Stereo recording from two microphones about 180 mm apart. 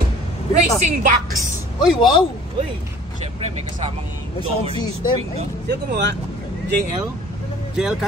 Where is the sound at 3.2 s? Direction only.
35° right (ahead or behind).